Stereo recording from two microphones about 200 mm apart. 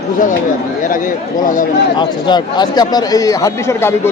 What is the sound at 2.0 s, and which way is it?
Speech, 20° left (ahead or behind).